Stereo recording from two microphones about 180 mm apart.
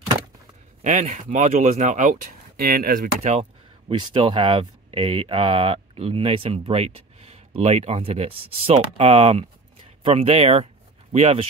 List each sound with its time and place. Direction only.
0.8 s speech: 45° right (ahead or behind)
3.2 s speech: 35° right (ahead or behind)